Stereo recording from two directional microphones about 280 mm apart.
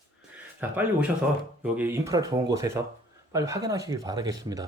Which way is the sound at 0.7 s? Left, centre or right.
Centre.